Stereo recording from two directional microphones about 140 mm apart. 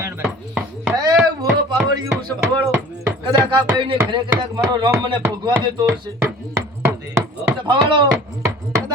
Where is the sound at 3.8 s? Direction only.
35° right (ahead or behind).